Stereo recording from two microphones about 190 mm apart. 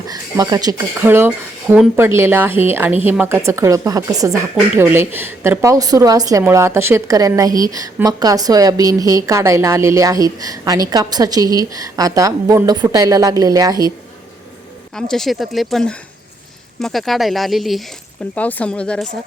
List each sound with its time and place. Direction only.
0.1 s a woman's voice: 20° right (ahead or behind)
4.3 s a woman's voice: 10° right (ahead or behind)
14.9 s speech: 5° left (ahead or behind)